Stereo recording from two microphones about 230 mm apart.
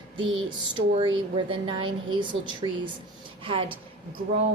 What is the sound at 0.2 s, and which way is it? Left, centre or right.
A woman's voice, right.